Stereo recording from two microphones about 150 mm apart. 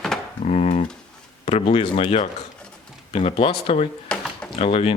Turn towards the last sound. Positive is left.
turn(degrees=40)  # may be behind; listen again after turning